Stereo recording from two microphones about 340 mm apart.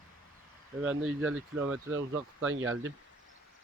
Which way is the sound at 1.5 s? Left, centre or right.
Centre.